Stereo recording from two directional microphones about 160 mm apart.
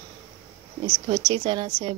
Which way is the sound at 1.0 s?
30° right (ahead or behind).